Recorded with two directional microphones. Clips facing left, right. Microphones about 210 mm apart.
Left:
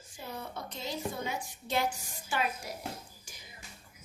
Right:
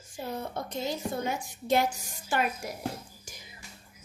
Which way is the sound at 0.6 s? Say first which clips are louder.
Right 4 dB; 45° right (ahead or behind).